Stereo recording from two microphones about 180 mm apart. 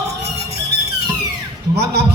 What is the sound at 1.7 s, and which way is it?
Speech, 70° right (ahead or behind).